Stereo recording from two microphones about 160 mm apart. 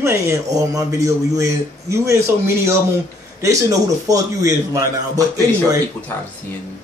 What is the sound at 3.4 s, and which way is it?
A man's voice, 20° right (ahead or behind).